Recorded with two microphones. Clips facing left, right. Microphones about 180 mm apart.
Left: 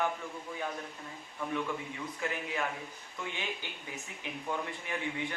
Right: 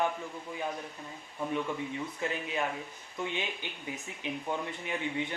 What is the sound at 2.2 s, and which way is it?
A man's voice, 25° right (ahead or behind).